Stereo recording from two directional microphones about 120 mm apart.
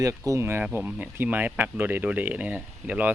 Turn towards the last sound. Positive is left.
turn(degrees=-10)  # may be behind; listen again after turning